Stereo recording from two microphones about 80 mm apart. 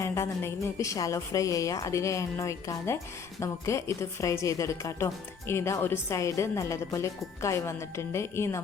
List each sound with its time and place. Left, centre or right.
0.0 s a woman's voice: left